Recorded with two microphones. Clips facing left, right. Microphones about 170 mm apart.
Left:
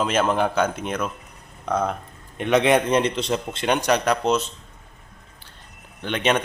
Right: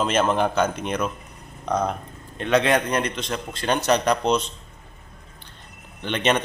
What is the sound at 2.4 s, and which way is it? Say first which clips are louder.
A man's voice: left 2 dB; 20° left (ahead or behind).